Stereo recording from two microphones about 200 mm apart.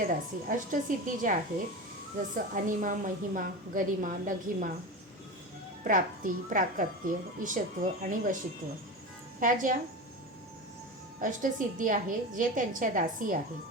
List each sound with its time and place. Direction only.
0.4 s a woman's voice: 40° right (ahead or behind)
5.8 s a woman's voice: 40° right (ahead or behind)
9.4 s a woman's voice: 40° right (ahead or behind)
11.2 s a woman's voice: 40° right (ahead or behind)